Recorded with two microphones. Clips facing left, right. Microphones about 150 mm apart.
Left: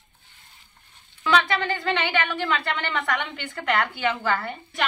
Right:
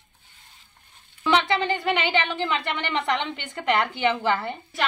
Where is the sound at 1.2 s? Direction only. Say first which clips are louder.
Right 1 dB; 20° right (ahead or behind).